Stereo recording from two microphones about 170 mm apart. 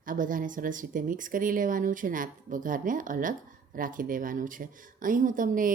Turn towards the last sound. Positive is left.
turn(degrees=-50)  # may be behind; listen again after turning